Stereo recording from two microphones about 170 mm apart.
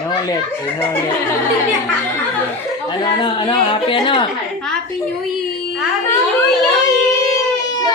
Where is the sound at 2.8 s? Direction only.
25° left (ahead or behind).